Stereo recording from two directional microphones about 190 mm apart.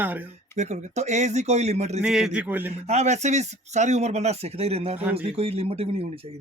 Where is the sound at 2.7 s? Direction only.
35° right (ahead or behind).